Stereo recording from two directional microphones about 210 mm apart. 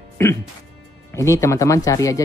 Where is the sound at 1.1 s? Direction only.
15° left (ahead or behind).